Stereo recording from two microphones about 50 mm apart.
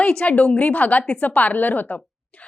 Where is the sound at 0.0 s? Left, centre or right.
Left.